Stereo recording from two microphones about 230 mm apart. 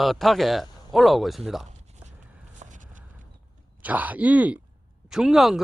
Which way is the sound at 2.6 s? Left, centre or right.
Right.